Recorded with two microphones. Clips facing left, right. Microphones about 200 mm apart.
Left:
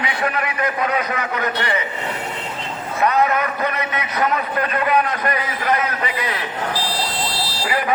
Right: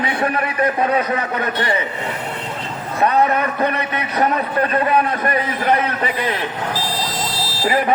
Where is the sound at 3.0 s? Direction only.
30° right (ahead or behind).